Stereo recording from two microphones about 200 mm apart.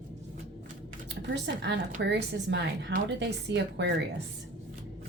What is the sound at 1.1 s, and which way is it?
Speech, 60° right (ahead or behind).